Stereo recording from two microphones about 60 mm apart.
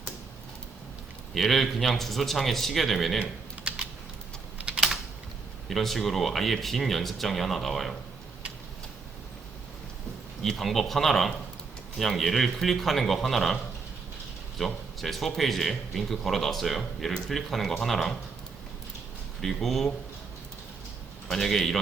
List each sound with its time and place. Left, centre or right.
1.3 s speech: centre
3.2 s typing: centre
5.6 s speech: centre
10.4 s speech: centre
14.6 s speech: centre
19.4 s speech: centre
21.2 s speech: centre